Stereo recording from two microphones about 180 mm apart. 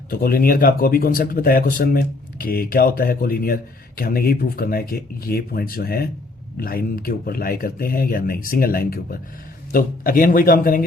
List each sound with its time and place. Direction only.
0.1 s speech: 55° left (ahead or behind)